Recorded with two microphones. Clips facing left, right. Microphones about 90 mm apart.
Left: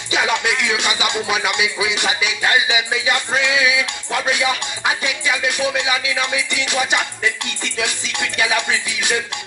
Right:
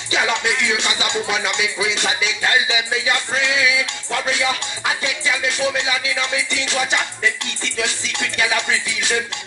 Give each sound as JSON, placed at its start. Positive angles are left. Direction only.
{"t": 0.1, "sound": "music", "side_deg": 20}